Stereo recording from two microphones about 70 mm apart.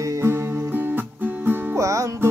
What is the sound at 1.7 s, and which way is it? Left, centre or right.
Music, right.